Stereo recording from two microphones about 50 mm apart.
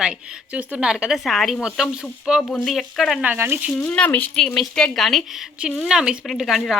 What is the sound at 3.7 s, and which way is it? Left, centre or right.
Speech, left.